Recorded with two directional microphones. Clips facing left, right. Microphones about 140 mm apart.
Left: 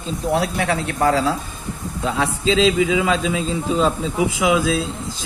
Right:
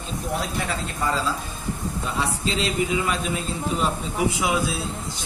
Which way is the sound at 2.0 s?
90° left.